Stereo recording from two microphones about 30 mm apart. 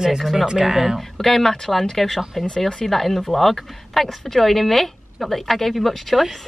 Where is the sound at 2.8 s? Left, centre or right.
Centre.